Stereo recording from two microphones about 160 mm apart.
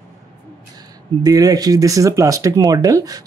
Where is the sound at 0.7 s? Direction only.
25° right (ahead or behind).